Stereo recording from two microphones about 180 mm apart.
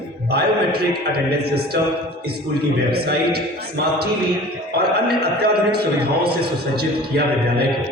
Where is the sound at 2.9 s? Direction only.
60° right (ahead or behind).